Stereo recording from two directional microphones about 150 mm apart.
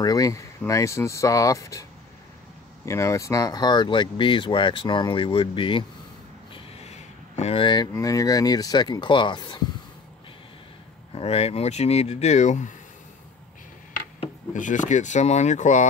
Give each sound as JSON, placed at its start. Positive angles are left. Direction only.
{"t": 0.0, "sound": "speech", "side_deg": 25}
{"t": 6.5, "sound": "speech", "side_deg": 45}
{"t": 11.1, "sound": "speech", "side_deg": 45}
{"t": 14.5, "sound": "speech", "side_deg": 55}